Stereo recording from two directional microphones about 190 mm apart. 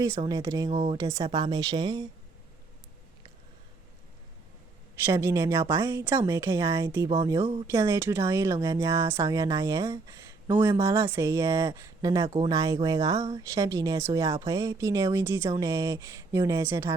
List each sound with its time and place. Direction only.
0.0 s speech: 20° right (ahead or behind)
5.0 s speech: 15° right (ahead or behind)
7.1 s speech: 25° right (ahead or behind)
7.7 s speech: 15° right (ahead or behind)